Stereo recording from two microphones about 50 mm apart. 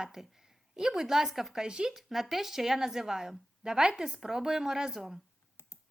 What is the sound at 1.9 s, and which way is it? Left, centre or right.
A woman's voice, centre.